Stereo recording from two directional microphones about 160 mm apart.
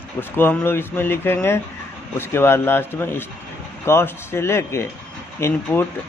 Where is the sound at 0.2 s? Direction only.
15° left (ahead or behind).